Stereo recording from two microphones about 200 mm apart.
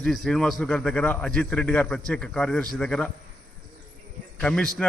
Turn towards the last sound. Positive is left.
turn(degrees=5)  # may be behind; listen again after turning